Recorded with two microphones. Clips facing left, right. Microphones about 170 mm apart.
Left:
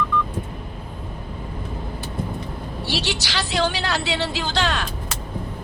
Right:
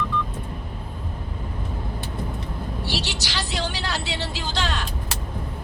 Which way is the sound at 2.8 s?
70° left (ahead or behind).